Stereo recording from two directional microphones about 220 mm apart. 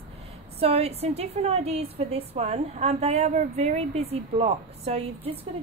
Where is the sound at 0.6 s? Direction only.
30° right (ahead or behind).